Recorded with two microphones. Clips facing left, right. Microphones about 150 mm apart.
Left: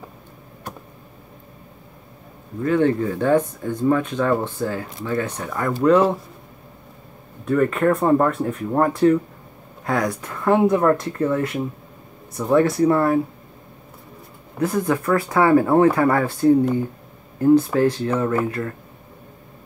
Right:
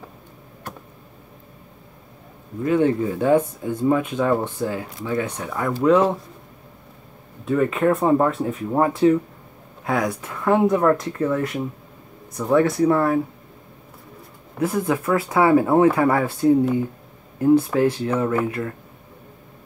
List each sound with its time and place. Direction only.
2.6 s speech: 20° right (ahead or behind)
5.4 s speech: 5° right (ahead or behind)
7.4 s speech: 10° right (ahead or behind)
14.6 s speech: 10° right (ahead or behind)
17.7 s speech: 10° right (ahead or behind)